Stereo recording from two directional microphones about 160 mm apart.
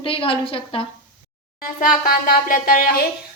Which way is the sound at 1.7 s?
60° left (ahead or behind).